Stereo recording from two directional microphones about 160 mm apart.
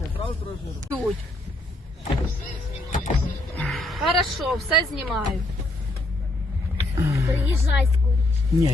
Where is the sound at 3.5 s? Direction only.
5° left (ahead or behind).